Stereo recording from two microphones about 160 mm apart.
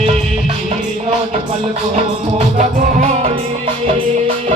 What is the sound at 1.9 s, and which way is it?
Music, 45° right (ahead or behind).